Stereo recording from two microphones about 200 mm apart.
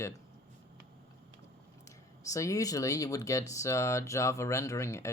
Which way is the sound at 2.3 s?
15° left (ahead or behind).